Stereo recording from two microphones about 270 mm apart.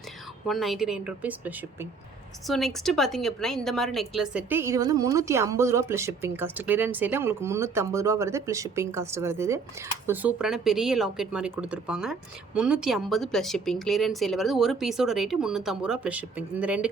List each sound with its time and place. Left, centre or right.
0.4 s a woman's voice: centre